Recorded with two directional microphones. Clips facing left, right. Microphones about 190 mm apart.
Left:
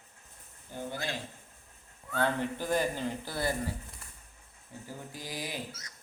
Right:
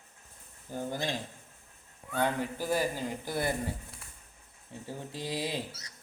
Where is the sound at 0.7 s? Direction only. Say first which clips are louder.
Right 4 dB; 40° right (ahead or behind).